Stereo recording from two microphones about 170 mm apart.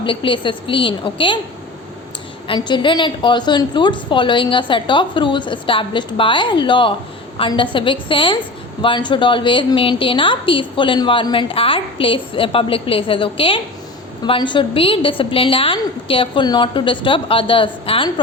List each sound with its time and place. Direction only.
0.0 s a woman's voice: 30° left (ahead or behind)
2.5 s a woman's voice: 25° left (ahead or behind)